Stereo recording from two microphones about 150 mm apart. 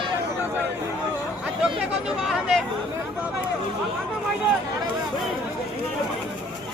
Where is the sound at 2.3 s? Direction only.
Centre (ahead or behind).